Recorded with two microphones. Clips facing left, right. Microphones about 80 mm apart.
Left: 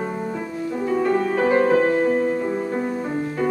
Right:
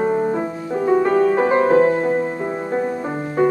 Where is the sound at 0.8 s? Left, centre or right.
Right.